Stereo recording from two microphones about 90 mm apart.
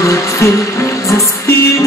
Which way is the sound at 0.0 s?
35° left (ahead or behind).